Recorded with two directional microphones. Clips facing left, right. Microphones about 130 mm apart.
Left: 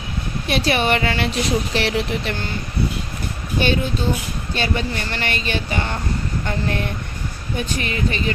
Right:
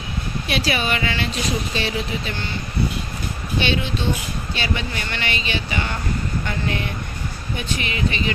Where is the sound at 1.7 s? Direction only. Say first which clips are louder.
Left 4 dB; 75° left (ahead or behind).